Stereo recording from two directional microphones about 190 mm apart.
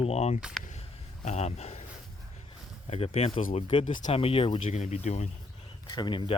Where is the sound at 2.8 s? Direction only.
35° left (ahead or behind).